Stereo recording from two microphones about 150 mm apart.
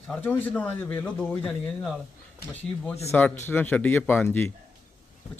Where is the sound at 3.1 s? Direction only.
10° left (ahead or behind).